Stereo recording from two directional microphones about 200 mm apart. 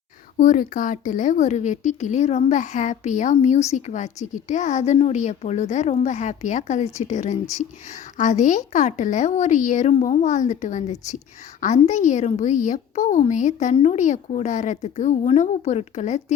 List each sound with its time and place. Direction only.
0.3 s speech: 40° left (ahead or behind)